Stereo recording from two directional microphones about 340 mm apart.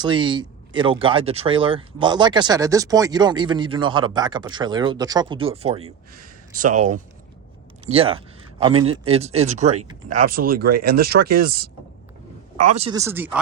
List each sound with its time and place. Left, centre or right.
0.0 s speech: centre
7.9 s speech: centre